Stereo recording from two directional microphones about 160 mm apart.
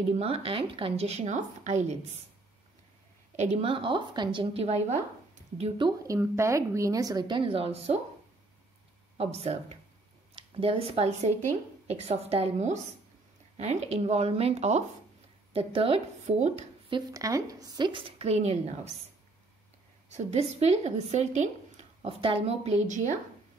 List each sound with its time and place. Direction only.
0.1 s speech: 40° right (ahead or behind)
3.3 s speech: 40° right (ahead or behind)
5.6 s a woman's voice: 30° right (ahead or behind)
9.1 s speech: 40° right (ahead or behind)
16.9 s a woman's voice: 20° right (ahead or behind); by 18.6 s 40° right (ahead or behind)
20.1 s speech: 45° right (ahead or behind)